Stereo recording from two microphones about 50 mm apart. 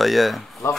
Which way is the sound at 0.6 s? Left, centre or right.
Left.